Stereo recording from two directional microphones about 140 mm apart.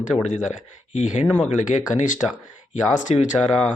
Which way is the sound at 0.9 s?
55° left (ahead or behind).